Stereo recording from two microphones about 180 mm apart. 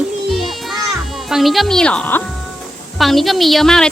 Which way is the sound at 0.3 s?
Centre (ahead or behind).